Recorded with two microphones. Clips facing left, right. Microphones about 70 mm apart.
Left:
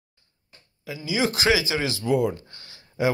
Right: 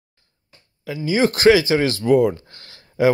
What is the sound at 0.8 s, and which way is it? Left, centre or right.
Speech, right.